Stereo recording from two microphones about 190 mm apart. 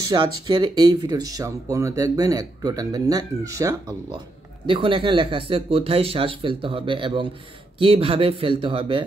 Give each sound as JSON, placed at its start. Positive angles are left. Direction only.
{"t": 0.1, "sound": "speech", "side_deg": -25}
{"t": 4.6, "sound": "speech", "side_deg": -30}